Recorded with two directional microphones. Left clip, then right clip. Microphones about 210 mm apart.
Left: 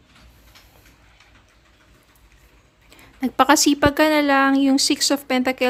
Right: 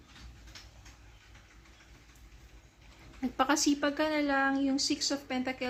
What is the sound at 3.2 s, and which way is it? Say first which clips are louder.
A woman's voice: left 13 dB; 50° left (ahead or behind).